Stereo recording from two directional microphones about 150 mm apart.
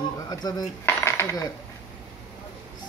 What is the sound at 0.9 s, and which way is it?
Cutlery, 15° left (ahead or behind).